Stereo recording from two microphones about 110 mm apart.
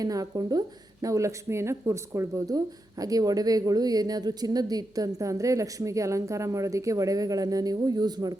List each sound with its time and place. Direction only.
0.0 s a woman's voice: 35° right (ahead or behind)